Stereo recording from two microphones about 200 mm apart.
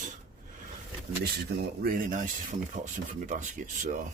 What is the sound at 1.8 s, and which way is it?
Speech, 45° right (ahead or behind).